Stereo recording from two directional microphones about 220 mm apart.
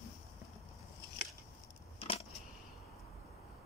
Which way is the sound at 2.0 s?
25° left (ahead or behind).